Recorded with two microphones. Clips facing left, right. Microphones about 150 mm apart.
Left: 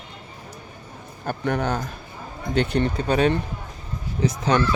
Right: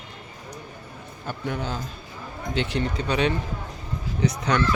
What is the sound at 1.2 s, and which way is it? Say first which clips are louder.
A man's voice: left 6 dB; 45° left (ahead or behind).